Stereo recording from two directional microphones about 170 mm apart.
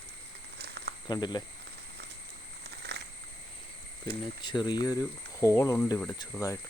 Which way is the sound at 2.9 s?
80° right.